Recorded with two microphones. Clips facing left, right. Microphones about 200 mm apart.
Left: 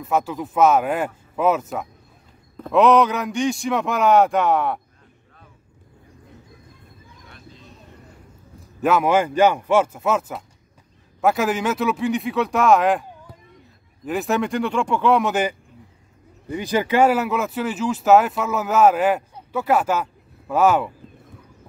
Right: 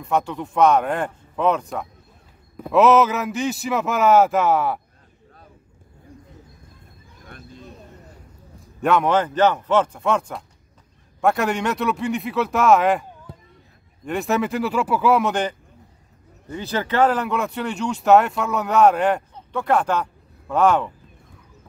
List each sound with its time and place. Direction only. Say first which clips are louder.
0.0 s speech: even; centre (ahead or behind)
7.2 s a sound: right 5 dB; 50° right (ahead or behind)
8.8 s speech: left 1 dB; 5° left (ahead or behind)
14.0 s speech: even; centre (ahead or behind)